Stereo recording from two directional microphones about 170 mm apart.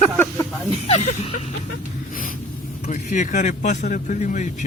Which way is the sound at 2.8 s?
50° left (ahead or behind).